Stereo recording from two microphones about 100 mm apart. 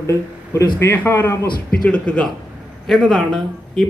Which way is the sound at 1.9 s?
10° left (ahead or behind).